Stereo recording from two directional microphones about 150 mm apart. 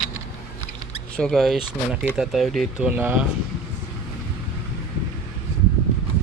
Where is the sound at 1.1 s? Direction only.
5° left (ahead or behind); by 3.2 s 10° right (ahead or behind).